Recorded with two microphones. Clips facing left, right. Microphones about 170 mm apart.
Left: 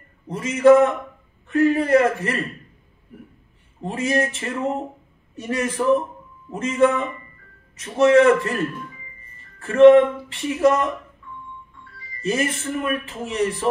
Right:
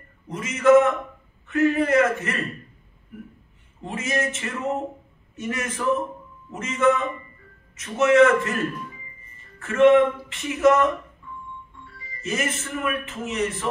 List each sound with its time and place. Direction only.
0.3 s speech: 35° left (ahead or behind)
3.8 s speech: 35° left (ahead or behind)
9.6 s speech: 35° left (ahead or behind)
12.2 s speech: 35° left (ahead or behind)